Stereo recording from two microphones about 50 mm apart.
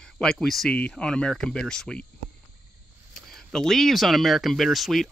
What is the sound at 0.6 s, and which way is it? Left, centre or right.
Speech, centre.